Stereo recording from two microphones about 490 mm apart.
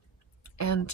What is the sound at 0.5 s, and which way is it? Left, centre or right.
Speech, left.